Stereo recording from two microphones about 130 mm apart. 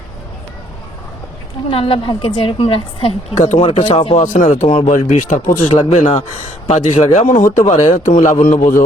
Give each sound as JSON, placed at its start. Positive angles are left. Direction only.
{"t": 1.7, "sound": "a woman's voice", "side_deg": 45}
{"t": 3.3, "sound": "speech", "side_deg": 65}
{"t": 3.6, "sound": "a woman's voice", "side_deg": 45}
{"t": 4.1, "sound": "speech", "side_deg": 70}
{"t": 7.9, "sound": "a man's voice", "side_deg": 70}